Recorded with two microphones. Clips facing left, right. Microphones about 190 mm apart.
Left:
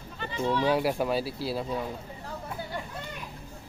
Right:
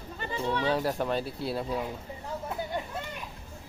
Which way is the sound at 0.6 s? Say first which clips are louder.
Left 3 dB; 10° left (ahead or behind).